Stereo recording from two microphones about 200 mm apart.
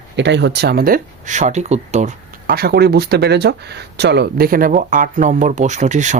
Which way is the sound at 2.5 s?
50° right (ahead or behind).